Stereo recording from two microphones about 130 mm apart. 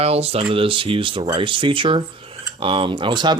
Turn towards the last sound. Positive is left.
turn(degrees=-35)  # may be behind; listen again after turning